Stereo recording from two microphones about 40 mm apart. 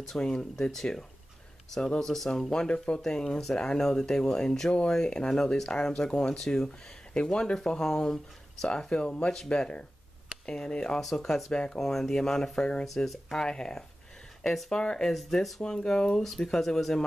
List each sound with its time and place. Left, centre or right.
0.2 s speech: centre
2.0 s speech: centre
2.5 s speech: centre
8.6 s speech: left
11.8 s speech: centre
12.2 s speech: centre
12.8 s speech: centre
13.4 s speech: centre
14.4 s speech: centre
14.7 s speech: centre
15.1 s speech: centre
15.6 s speech: centre
16.2 s speech: centre